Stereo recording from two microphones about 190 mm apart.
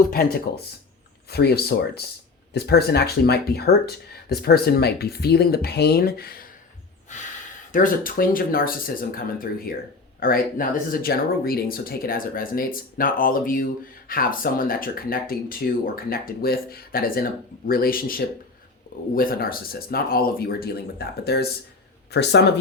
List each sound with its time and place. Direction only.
0.0 s speech: 55° left (ahead or behind)
7.1 s speech: 40° left (ahead or behind); by 22.5 s 65° left (ahead or behind)